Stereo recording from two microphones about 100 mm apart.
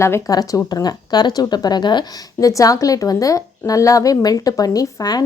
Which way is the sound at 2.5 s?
35° left (ahead or behind).